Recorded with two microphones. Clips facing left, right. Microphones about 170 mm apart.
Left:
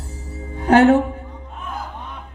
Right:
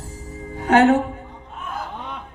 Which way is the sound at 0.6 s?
35° left (ahead or behind).